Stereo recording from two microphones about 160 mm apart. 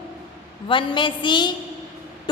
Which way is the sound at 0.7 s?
30° left (ahead or behind).